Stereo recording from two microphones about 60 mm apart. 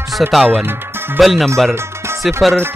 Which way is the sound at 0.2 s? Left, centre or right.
Centre.